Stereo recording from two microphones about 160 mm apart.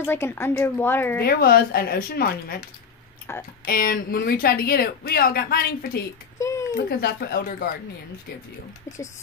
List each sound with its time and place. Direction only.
0.0 s a woman's voice: 15° left (ahead or behind)
1.2 s speech: 70° left (ahead or behind)
3.3 s a woman's voice: 15° left (ahead or behind)
3.6 s speech: 65° left (ahead or behind)
6.3 s a sound: 20° left (ahead or behind)
6.9 s speech: 75° left (ahead or behind)
8.8 s speech: 20° left (ahead or behind)